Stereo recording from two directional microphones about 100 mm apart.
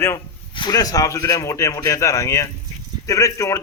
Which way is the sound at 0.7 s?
35° left (ahead or behind).